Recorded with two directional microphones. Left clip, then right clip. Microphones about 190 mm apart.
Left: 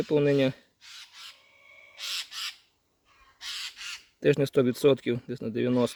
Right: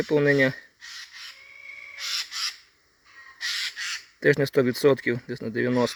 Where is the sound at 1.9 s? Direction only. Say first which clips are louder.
Right 4 dB; 35° left (ahead or behind).